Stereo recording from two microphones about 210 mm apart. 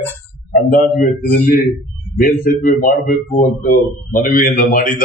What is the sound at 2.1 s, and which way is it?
A man's voice, 40° left (ahead or behind).